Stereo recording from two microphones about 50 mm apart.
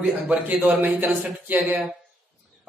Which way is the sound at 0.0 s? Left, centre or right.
Right.